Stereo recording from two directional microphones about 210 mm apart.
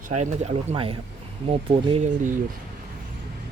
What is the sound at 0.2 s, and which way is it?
Speech, 30° right (ahead or behind).